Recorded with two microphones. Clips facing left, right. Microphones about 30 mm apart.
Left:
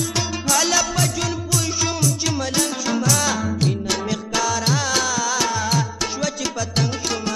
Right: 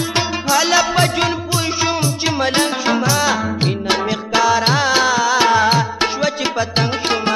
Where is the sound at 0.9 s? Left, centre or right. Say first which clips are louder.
Right 7 dB; right.